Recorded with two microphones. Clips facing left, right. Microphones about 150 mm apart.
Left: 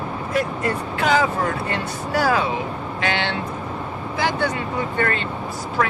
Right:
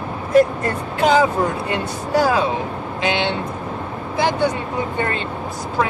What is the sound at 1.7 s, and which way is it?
Speech, 20° right (ahead or behind).